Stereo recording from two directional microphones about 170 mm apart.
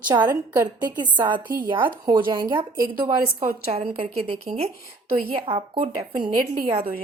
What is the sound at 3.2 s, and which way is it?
Speech, 55° right (ahead or behind).